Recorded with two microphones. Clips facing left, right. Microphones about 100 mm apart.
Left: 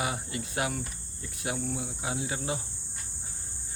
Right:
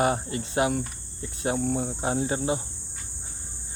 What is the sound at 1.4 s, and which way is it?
Speech, 40° right (ahead or behind).